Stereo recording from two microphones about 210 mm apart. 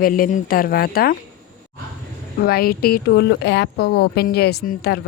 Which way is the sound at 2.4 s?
45° left (ahead or behind).